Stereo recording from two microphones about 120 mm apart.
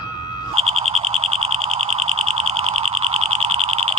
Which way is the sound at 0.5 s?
60° right (ahead or behind).